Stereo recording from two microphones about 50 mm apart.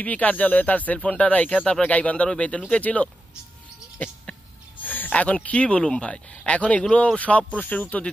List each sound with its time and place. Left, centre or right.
0.0 s speech: left